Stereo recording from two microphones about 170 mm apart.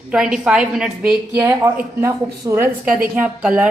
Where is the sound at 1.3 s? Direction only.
15° right (ahead or behind).